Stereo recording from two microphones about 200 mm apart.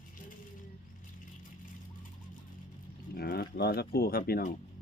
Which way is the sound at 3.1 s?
50° left (ahead or behind).